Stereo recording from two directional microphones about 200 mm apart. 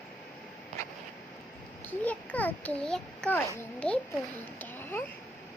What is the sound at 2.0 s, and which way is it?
A child's voice, 5° left (ahead or behind).